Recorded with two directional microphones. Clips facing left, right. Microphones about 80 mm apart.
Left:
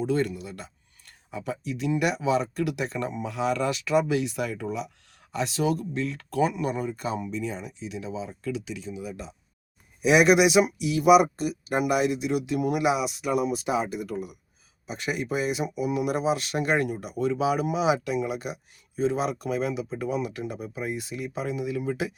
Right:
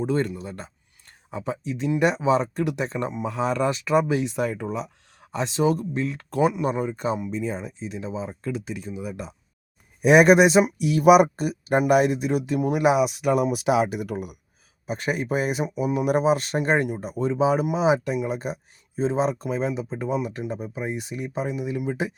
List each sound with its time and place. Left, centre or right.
0.0 s speech: right
7.3 s speech: right
12.5 s speech: right
12.8 s speech: right
14.8 s speech: right
15.6 s speech: right